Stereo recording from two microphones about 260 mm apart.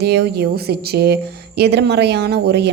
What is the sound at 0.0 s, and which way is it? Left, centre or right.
A woman's voice, right.